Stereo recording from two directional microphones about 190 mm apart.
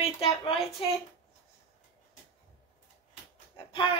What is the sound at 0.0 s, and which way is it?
Speech, 30° left (ahead or behind).